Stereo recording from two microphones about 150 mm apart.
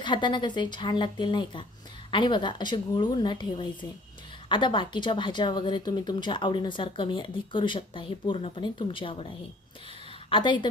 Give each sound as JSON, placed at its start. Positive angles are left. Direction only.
{"t": 0.0, "sound": "speech", "side_deg": 30}
{"t": 10.2, "sound": "speech", "side_deg": 35}